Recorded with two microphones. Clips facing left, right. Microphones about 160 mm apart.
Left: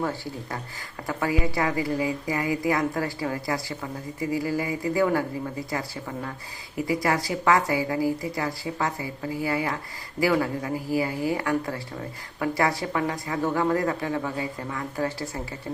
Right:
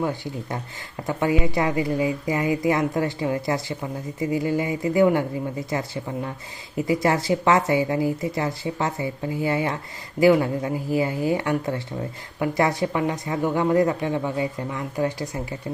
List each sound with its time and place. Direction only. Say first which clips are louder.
0.0 s speech: right 3 dB; 20° right (ahead or behind)